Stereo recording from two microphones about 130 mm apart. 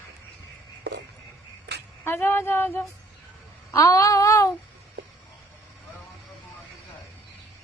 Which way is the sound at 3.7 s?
25° left (ahead or behind).